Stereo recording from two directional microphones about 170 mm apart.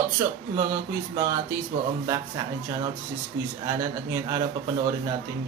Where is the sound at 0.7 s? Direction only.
20° right (ahead or behind).